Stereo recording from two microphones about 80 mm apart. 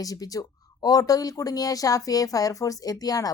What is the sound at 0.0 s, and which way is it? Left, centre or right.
Speech, left.